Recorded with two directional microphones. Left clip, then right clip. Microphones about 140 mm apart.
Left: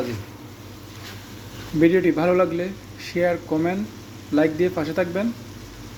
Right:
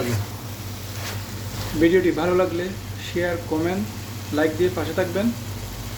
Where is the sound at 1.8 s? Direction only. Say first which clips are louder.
Left 1 dB; 45° left (ahead or behind).